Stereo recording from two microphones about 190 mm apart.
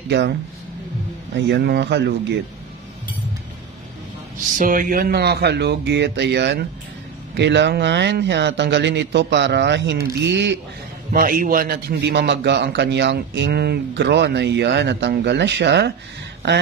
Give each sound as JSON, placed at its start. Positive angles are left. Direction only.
{"t": 0.1, "sound": "a man's voice", "side_deg": -65}
{"t": 4.6, "sound": "a man's voice", "side_deg": -45}
{"t": 11.1, "sound": "a man's voice", "side_deg": -50}